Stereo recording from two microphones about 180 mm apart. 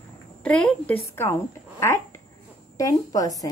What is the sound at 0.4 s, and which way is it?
A woman's voice, 5° left (ahead or behind).